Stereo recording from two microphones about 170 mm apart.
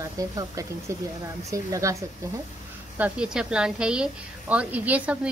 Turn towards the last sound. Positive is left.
turn(degrees=-10)  # may be behind; listen again after turning